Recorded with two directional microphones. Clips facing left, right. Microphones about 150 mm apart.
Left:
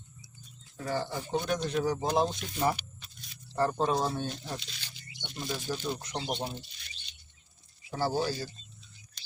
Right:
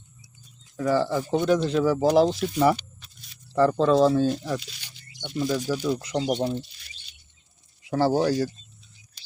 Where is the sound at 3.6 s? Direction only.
90° right.